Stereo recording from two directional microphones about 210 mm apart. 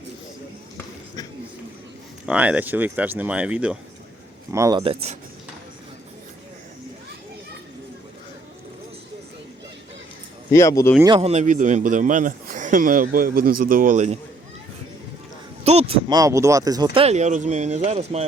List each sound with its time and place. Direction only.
2.2 s speech: 5° right (ahead or behind)
4.8 s speech: 25° right (ahead or behind)
10.5 s speech: 15° left (ahead or behind)
11.0 s a man's voice: 25° right (ahead or behind)
15.6 s speech: 30° right (ahead or behind)